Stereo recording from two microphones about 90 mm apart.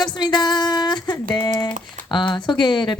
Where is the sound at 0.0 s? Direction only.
55° left (ahead or behind).